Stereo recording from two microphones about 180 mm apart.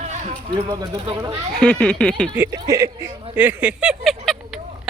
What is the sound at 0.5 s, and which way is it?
Speech, 25° right (ahead or behind).